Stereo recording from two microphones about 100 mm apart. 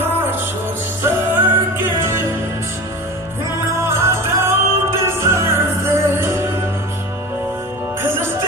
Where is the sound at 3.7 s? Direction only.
25° right (ahead or behind).